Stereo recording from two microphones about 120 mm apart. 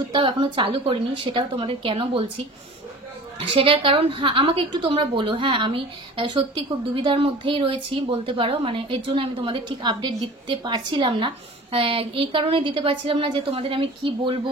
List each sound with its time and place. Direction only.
0.1 s a woman's voice: 40° right (ahead or behind)
3.3 s a woman's voice: 50° right (ahead or behind)